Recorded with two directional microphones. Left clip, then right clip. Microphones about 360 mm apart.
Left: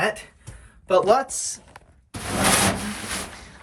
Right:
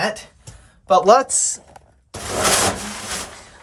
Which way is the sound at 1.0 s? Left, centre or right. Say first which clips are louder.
Right 6 dB; right.